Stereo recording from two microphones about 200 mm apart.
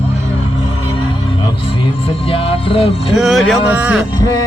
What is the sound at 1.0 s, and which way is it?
Speech, 25° left (ahead or behind).